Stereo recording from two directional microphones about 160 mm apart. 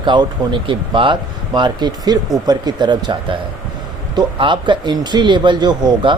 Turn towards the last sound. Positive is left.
turn(degrees=-30)  # may be behind; listen again after turning